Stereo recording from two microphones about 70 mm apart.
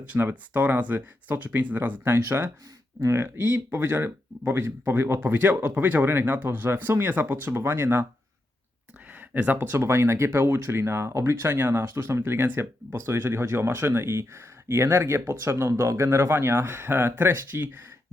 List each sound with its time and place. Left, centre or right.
0.0 s speech: centre
9.3 s speech: right